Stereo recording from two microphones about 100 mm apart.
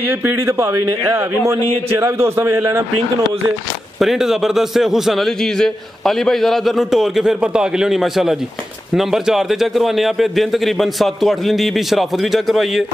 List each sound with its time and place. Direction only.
0.2 s a man's voice: 20° right (ahead or behind)
1.4 s a man's voice: 30° right (ahead or behind)
4.0 s a man's voice: 5° right (ahead or behind)